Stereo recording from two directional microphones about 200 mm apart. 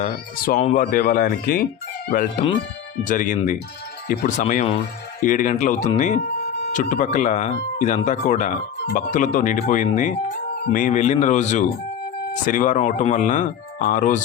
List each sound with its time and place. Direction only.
0.0 s speech: 40° left (ahead or behind)
2.4 s speech: 25° left (ahead or behind)
3.0 s speech: 40° left (ahead or behind)